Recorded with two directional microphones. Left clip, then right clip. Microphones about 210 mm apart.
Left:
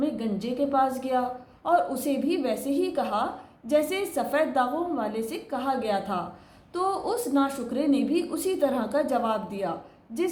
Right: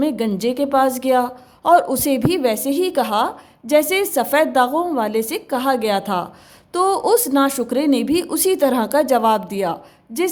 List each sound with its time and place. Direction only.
0.0 s a woman's voice: 50° right (ahead or behind)